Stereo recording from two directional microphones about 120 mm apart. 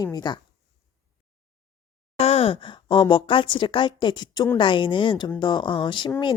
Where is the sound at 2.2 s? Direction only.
55° left (ahead or behind).